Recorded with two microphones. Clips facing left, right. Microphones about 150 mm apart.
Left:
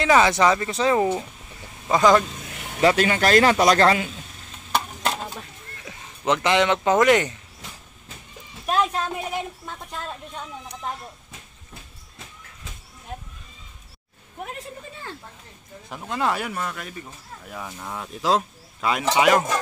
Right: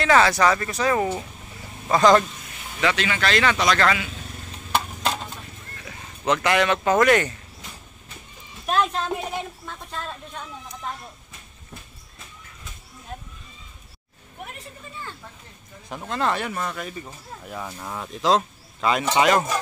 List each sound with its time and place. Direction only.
0.0 s speech: 20° left (ahead or behind)
1.9 s speech: 10° left (ahead or behind)
2.8 s speech: 40° left (ahead or behind)
5.9 s speech: 20° left (ahead or behind)
8.6 s a woman's voice: 5° left (ahead or behind)
15.9 s speech: centre (ahead or behind)